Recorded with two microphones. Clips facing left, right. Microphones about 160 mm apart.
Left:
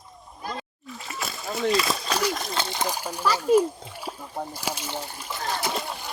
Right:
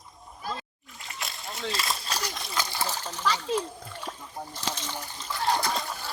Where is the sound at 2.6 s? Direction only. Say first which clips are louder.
Left 3 dB; 20° left (ahead or behind).